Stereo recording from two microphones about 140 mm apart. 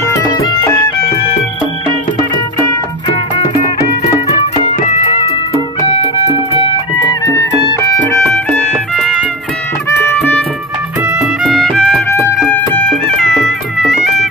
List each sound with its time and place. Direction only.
0.1 s music: 30° left (ahead or behind)
4.8 s music: 55° left (ahead or behind)
7.6 s music: 25° left (ahead or behind)
8.0 s music: 10° left (ahead or behind)
9.8 s music: 15° left (ahead or behind)
11.4 s music: 5° left (ahead or behind)